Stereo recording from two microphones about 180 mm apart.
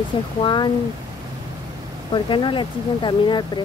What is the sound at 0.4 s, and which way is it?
Speech, 25° left (ahead or behind).